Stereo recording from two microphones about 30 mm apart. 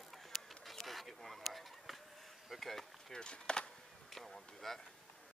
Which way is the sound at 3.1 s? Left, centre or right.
Left.